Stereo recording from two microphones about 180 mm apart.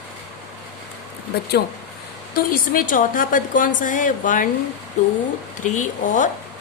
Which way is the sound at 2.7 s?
50° left (ahead or behind).